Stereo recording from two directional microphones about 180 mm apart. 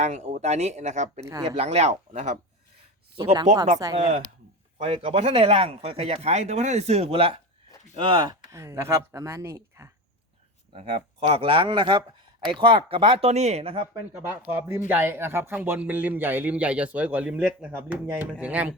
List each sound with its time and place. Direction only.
0.0 s speech: 40° right (ahead or behind)
1.2 s a man's voice: 15° right (ahead or behind)
1.5 s speech: 35° right (ahead or behind)
3.9 s a man's voice: 35° right (ahead or behind); by 9.9 s 15° right (ahead or behind)
10.7 s speech: 35° right (ahead or behind)
14.1 s a man's voice: 10° right (ahead or behind)